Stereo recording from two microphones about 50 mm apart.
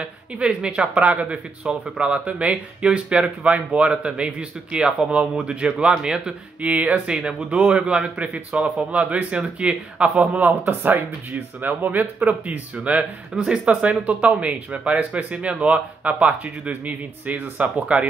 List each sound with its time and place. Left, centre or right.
0.0 s speech: right
10.6 s speech: right
13.3 s speech: centre
13.7 s speech: right